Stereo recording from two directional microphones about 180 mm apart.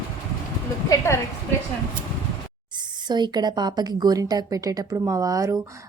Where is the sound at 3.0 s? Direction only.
25° right (ahead or behind).